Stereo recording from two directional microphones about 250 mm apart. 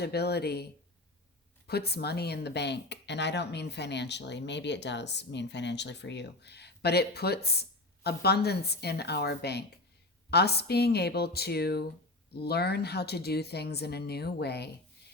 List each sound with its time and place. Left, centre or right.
0.0 s speech: left